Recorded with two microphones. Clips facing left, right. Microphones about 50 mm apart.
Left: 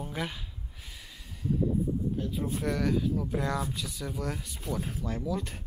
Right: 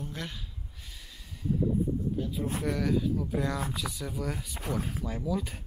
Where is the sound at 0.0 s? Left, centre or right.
Centre.